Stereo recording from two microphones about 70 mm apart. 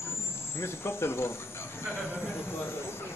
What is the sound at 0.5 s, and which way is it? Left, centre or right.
Speech, left.